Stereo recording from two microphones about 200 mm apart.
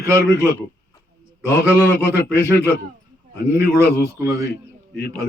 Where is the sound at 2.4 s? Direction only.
55° left (ahead or behind).